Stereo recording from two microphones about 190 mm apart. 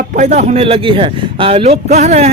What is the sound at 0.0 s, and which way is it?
Speech, 45° right (ahead or behind).